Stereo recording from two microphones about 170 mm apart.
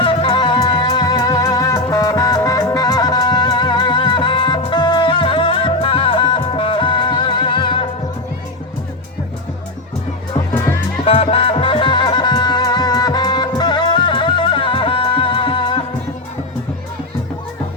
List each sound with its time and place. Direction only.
0.0 s music: 30° left (ahead or behind)
10.5 s music: 10° left (ahead or behind)
11.0 s music: 35° left (ahead or behind)